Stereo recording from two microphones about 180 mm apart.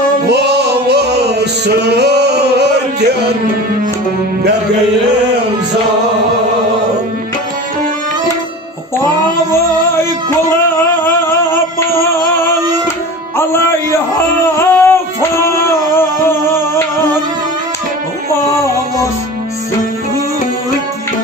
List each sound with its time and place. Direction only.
0.3 s music: 70° right (ahead or behind)
13.3 s music: 15° left (ahead or behind)